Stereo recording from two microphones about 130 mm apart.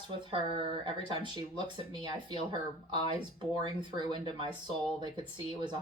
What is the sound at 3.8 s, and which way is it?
Speech, 40° right (ahead or behind).